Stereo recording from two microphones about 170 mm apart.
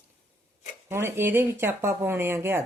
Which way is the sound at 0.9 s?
15° right (ahead or behind).